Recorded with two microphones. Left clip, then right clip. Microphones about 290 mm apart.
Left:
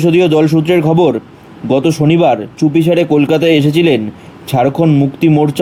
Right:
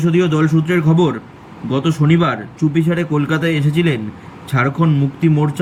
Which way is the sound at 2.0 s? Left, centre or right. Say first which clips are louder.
Left 7 dB; left.